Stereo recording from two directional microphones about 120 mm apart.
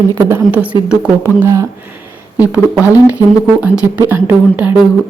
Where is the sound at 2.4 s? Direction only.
15° right (ahead or behind).